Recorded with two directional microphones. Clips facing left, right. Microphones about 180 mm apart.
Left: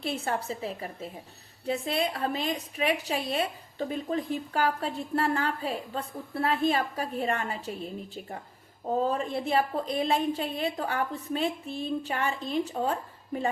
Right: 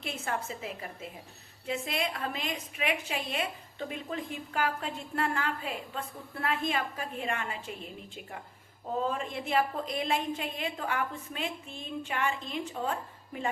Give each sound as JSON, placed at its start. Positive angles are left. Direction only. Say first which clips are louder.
{"t": 0.0, "sound": "a woman's voice", "louder": "left 4 dB", "side_deg": 35}